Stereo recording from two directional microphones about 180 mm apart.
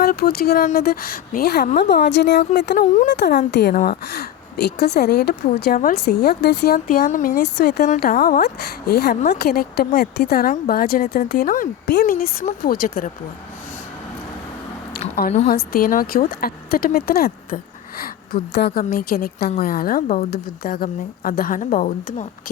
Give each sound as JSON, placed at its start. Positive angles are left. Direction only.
{"t": 0.0, "sound": "speech", "side_deg": 60}
{"t": 7.4, "sound": "speech", "side_deg": 65}
{"t": 15.4, "sound": "a woman's voice", "side_deg": 55}